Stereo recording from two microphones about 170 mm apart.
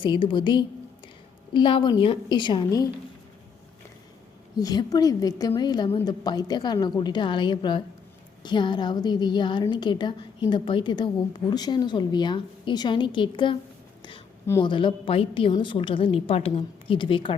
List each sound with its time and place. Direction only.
0.0 s a woman's voice: 30° left (ahead or behind)
4.6 s a woman's voice: 20° left (ahead or behind)
14.6 s a woman's voice: 30° left (ahead or behind)